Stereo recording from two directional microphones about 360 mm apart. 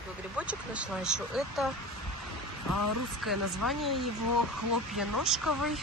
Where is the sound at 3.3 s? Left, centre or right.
Centre.